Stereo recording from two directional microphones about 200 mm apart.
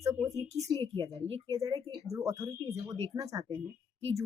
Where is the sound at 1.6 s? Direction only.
15° right (ahead or behind).